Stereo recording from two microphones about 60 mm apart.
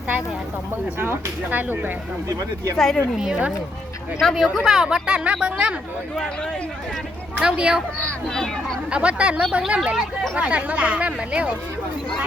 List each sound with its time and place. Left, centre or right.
0.9 s speech: right
2.7 s speech: centre
4.2 s speech: centre
7.3 s speech: centre
8.3 s speech: centre
8.9 s speech: centre
10.3 s speech: right